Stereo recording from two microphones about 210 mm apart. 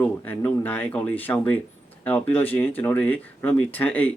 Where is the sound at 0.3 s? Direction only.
10° left (ahead or behind).